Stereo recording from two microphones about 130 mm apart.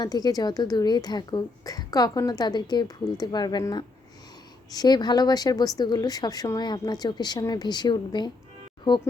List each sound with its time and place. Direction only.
0.0 s a woman's voice: 30° left (ahead or behind)